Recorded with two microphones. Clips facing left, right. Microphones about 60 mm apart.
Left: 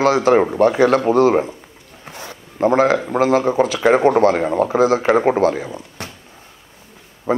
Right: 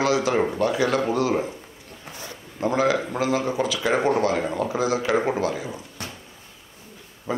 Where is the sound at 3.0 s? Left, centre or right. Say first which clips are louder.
Left 8 dB; left.